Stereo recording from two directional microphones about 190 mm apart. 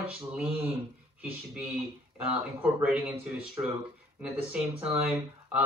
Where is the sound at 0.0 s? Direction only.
5° right (ahead or behind).